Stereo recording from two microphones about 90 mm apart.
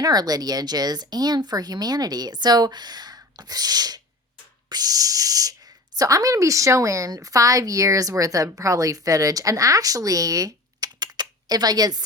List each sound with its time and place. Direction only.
0.0 s speech: 45° right (ahead or behind)